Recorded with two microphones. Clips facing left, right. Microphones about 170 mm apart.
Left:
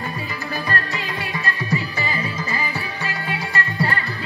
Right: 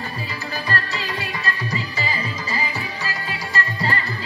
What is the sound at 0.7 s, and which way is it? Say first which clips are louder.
Music: right 2 dB; 50° left (ahead or behind).